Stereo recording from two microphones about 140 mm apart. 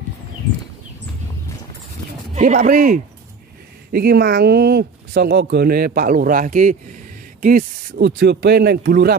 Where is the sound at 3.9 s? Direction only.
90° right; by 6.7 s 65° right (ahead or behind).